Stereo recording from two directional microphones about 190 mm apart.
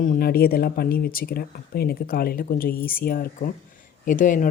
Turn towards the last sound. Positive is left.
turn(degrees=45)  # may be behind; listen again after turning